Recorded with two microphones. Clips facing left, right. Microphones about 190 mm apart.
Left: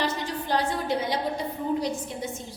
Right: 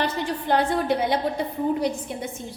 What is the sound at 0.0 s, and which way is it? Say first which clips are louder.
A woman's voice: right 3 dB; 55° right (ahead or behind).